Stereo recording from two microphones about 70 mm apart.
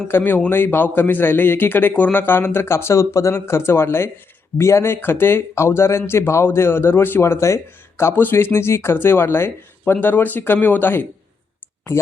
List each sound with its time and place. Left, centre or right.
0.1 s a man's voice: left